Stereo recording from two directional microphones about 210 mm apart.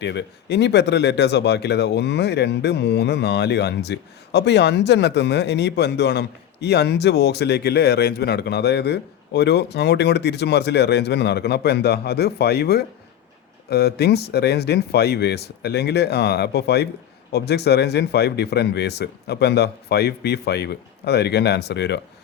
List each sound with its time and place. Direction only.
0.0 s speech: 55° left (ahead or behind)